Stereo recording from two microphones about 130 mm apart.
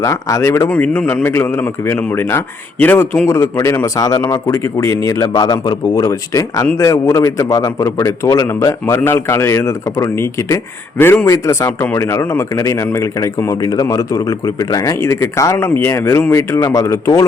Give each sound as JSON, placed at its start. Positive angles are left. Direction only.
{"t": 0.0, "sound": "a man's voice", "side_deg": 25}
{"t": 0.7, "sound": "a man's voice", "side_deg": 10}